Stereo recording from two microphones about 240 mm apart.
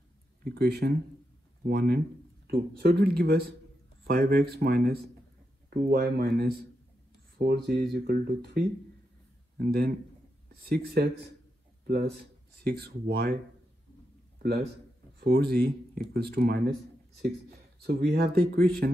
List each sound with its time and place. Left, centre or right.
0.4 s speech: right
12.6 s speech: right
14.4 s a man's voice: right